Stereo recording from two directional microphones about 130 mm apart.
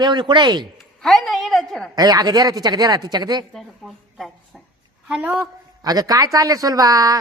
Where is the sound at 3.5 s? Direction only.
Centre (ahead or behind).